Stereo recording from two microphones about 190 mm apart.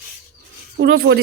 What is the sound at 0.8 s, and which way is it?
Speech, 60° right (ahead or behind).